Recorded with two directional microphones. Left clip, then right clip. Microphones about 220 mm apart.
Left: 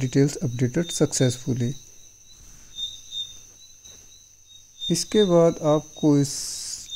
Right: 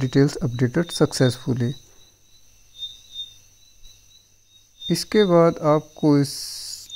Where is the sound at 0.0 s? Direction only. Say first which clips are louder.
Right 2 dB; 15° right (ahead or behind).